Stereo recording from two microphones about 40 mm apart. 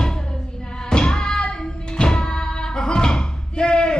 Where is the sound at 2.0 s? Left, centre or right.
Left.